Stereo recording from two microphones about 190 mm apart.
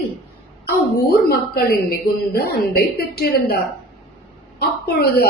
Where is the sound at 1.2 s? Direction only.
55° left (ahead or behind).